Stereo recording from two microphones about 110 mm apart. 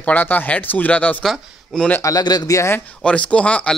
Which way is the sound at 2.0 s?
35° left (ahead or behind).